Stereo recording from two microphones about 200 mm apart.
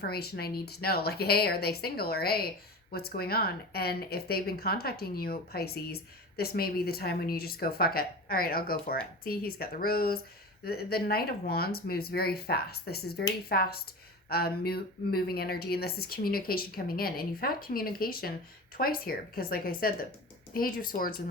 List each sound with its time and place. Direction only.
0.0 s speech: 50° left (ahead or behind)